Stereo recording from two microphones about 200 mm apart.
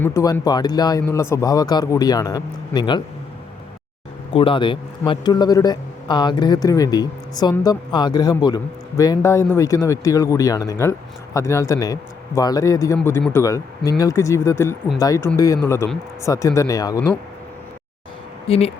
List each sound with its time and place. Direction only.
0.0 s a man's voice: 15° left (ahead or behind)
4.3 s a man's voice: 25° left (ahead or behind)
18.4 s speech: 30° left (ahead or behind)